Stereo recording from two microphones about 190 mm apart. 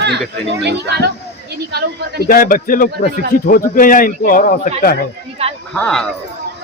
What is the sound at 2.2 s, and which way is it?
Speech, 50° left (ahead or behind).